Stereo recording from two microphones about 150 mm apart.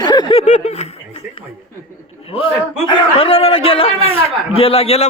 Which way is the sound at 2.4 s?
35° left (ahead or behind).